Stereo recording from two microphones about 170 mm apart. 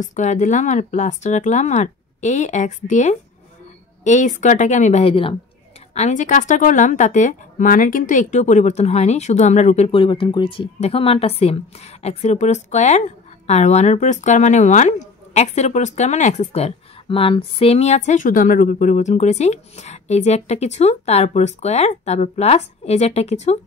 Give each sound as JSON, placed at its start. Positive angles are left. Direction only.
{"t": 0.0, "sound": "a woman's voice", "side_deg": 45}
{"t": 5.9, "sound": "a woman's voice", "side_deg": 45}
{"t": 9.8, "sound": "speech", "side_deg": 30}